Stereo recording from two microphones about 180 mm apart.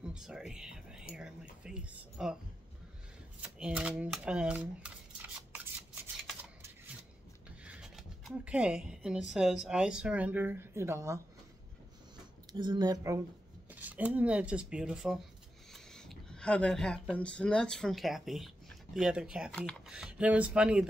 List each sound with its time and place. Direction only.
0.0 s speech: 5° right (ahead or behind)
3.5 s speech: 5° right (ahead or behind)
7.6 s speech: 5° right (ahead or behind)
12.5 s speech: 25° right (ahead or behind)
13.7 s speech: 10° right (ahead or behind)